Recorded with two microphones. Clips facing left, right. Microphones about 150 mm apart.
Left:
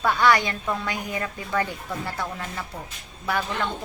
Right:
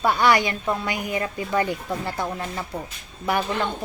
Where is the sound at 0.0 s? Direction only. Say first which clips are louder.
Right 1 dB; 15° right (ahead or behind).